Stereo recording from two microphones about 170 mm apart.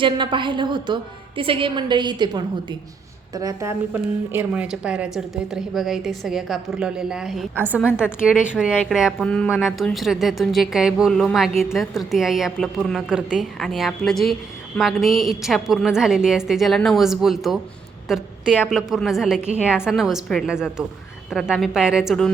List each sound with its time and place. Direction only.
0.0 s a woman's voice: 30° right (ahead or behind); by 22.3 s centre (ahead or behind)